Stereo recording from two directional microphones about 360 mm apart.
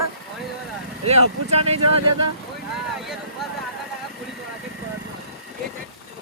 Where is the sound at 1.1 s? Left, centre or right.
Centre.